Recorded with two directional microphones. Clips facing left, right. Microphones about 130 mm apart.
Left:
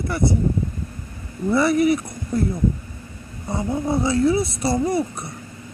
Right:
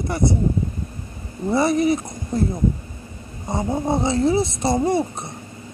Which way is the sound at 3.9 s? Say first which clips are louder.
Left 1 dB; 25° right (ahead or behind).